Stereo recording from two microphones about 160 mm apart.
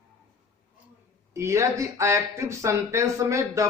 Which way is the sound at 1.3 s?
20° right (ahead or behind).